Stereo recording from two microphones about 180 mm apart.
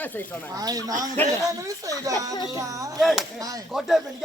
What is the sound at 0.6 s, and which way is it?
Speech, 20° right (ahead or behind).